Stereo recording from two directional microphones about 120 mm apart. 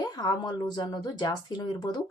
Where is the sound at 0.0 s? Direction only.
35° left (ahead or behind).